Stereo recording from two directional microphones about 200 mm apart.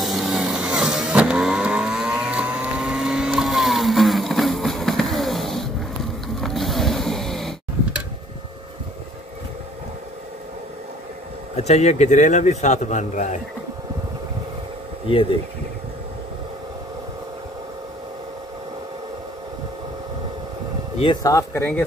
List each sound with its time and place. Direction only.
0.0 s vehicle: centre (ahead or behind)
6.2 s a sound: centre (ahead or behind)
11.5 s a man's voice: 35° left (ahead or behind)
21.0 s speech: 20° left (ahead or behind)